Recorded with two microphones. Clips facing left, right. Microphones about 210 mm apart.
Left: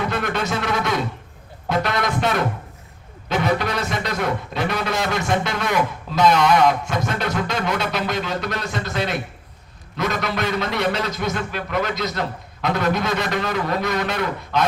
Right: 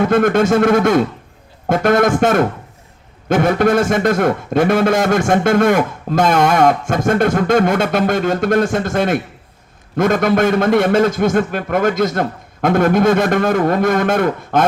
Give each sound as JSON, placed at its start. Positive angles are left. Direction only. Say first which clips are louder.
{"t": 0.0, "sound": "a man's voice", "louder": "right 11 dB", "side_deg": -50}